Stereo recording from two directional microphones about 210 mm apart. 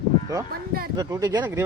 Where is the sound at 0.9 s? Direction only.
15° right (ahead or behind).